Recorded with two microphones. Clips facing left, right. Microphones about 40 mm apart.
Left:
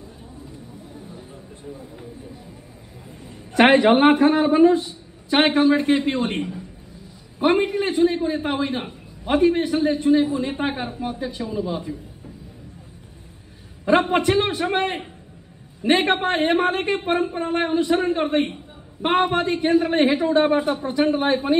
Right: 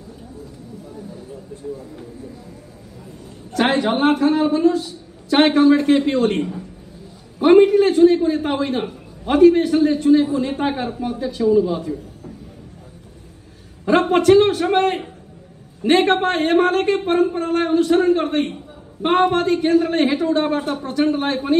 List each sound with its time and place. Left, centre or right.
3.5 s a man's voice: left
11.5 s a man's voice: centre
13.8 s a man's voice: left